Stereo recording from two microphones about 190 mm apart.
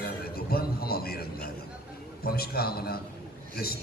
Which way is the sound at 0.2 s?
55° left (ahead or behind).